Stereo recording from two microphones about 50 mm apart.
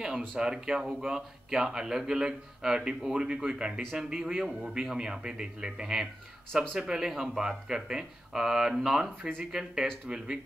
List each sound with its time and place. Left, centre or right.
0.4 s speech: centre